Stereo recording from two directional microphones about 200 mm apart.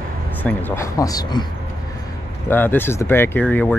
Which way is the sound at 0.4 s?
10° left (ahead or behind).